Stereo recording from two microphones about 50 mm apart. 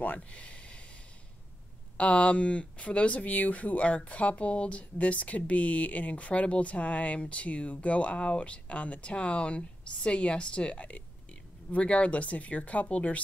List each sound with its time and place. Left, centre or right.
0.0 s speech: left
2.0 s speech: left